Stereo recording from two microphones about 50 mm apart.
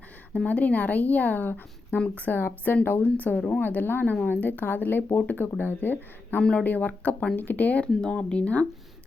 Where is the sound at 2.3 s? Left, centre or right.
Left.